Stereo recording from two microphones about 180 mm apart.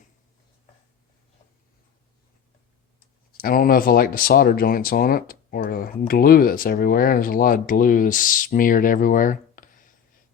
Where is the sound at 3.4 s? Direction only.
55° left (ahead or behind).